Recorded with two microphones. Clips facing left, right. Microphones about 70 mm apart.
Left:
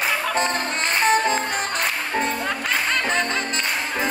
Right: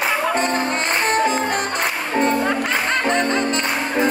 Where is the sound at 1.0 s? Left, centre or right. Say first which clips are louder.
Even; centre.